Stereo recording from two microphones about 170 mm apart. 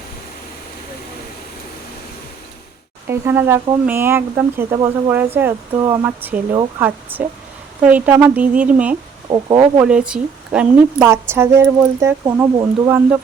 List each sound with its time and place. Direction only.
3.1 s a woman's voice: 15° right (ahead or behind)
9.3 s speech: 25° right (ahead or behind)
9.8 s a woman's voice: 5° right (ahead or behind); by 12.9 s 25° right (ahead or behind)